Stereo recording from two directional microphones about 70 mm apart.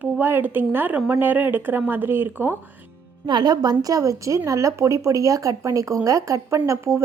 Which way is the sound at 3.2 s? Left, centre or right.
Right.